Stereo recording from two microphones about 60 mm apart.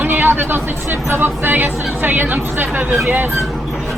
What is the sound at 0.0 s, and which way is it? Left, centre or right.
Speech, right.